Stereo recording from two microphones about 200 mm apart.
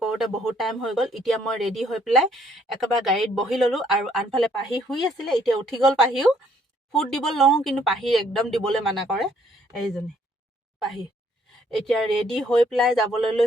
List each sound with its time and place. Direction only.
0.0 s speech: centre (ahead or behind)
11.8 s speech: centre (ahead or behind)